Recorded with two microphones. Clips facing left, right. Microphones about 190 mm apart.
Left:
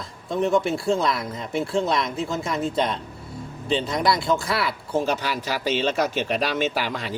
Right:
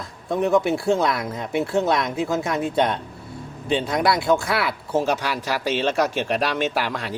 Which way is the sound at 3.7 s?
5° right (ahead or behind).